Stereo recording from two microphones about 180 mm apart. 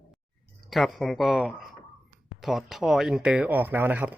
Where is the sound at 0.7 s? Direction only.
Centre (ahead or behind).